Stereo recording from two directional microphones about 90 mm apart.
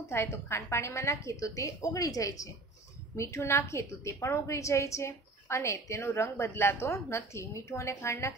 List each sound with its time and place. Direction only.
0.0 s a woman's voice: 30° left (ahead or behind)